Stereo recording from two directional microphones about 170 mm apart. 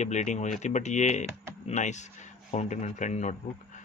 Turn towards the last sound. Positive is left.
turn(degrees=45)  # may be behind; listen again after turning